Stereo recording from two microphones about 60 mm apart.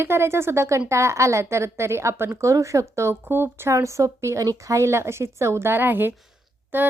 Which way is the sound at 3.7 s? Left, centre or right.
Right.